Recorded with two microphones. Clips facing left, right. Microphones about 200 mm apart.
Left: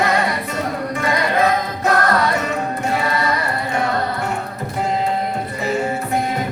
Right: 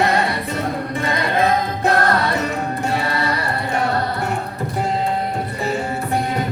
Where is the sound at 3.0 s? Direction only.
35° right (ahead or behind).